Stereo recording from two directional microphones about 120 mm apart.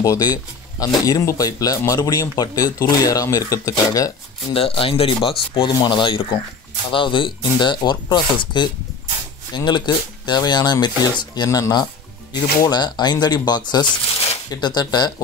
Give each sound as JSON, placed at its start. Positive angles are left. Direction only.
{"t": 0.0, "sound": "speech", "side_deg": 30}
{"t": 4.6, "sound": "speech", "side_deg": 50}
{"t": 9.7, "sound": "speech", "side_deg": 40}